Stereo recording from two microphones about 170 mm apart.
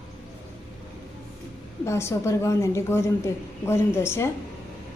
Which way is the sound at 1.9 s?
15° left (ahead or behind).